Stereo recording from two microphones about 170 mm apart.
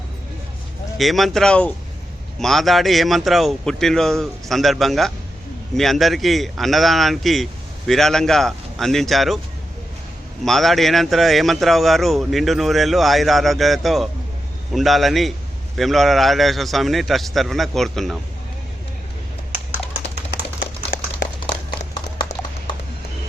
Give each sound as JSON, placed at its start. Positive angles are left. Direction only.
{"t": 0.9, "sound": "speech", "side_deg": 0}
{"t": 10.4, "sound": "speech", "side_deg": 0}
{"t": 20.9, "sound": "a sound", "side_deg": 60}
{"t": 22.2, "sound": "clip-clop", "side_deg": 25}